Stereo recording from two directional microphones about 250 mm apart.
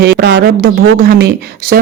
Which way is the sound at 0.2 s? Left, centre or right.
Right.